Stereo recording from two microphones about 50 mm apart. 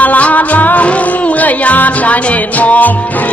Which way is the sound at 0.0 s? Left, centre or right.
Left.